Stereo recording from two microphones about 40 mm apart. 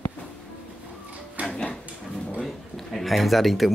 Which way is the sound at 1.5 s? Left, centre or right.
Left.